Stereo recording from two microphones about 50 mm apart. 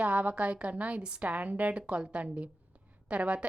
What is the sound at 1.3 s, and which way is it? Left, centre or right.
A woman's voice, right.